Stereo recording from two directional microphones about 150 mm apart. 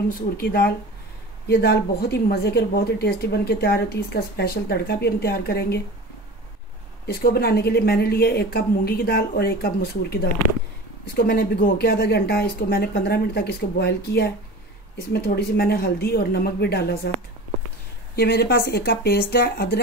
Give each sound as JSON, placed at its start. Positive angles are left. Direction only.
{"t": 0.4, "sound": "a woman's voice", "side_deg": 90}
{"t": 7.1, "sound": "a woman's voice", "side_deg": 90}
{"t": 11.1, "sound": "a woman's voice", "side_deg": 85}
{"t": 18.1, "sound": "a woman's voice", "side_deg": 90}